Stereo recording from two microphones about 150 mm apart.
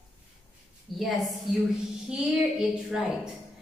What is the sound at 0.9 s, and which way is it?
Music, centre (ahead or behind).